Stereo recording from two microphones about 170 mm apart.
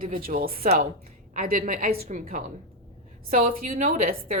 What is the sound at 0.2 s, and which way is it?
A woman's voice, 55° right (ahead or behind).